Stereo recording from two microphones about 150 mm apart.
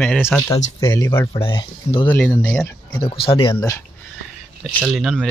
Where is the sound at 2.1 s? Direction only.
10° left (ahead or behind).